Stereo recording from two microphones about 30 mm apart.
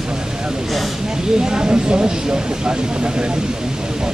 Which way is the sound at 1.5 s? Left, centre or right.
Right.